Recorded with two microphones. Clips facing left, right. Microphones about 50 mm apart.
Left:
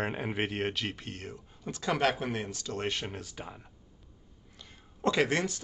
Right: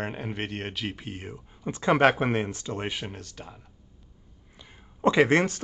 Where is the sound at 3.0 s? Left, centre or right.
Centre.